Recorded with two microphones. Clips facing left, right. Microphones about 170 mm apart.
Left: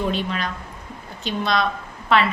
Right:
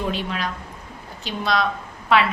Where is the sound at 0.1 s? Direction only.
5° right (ahead or behind).